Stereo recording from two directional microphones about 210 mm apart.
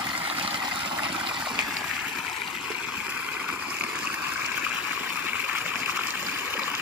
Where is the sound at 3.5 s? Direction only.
5° right (ahead or behind).